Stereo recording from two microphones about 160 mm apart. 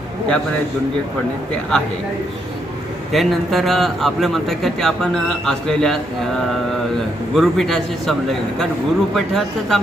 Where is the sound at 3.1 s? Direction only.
Centre (ahead or behind).